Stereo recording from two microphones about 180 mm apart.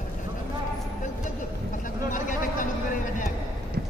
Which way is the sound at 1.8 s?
45° left (ahead or behind).